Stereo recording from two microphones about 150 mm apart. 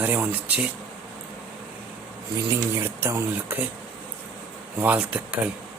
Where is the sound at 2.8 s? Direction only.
15° right (ahead or behind).